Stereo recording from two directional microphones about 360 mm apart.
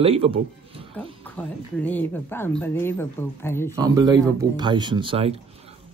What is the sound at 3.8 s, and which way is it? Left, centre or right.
A man's voice, centre.